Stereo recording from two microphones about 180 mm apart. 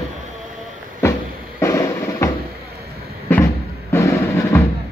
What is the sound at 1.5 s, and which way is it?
Drum, 15° left (ahead or behind).